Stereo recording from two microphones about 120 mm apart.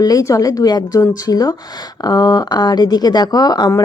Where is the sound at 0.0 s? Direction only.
30° left (ahead or behind).